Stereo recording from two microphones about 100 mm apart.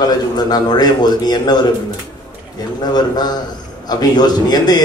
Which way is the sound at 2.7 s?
45° left (ahead or behind).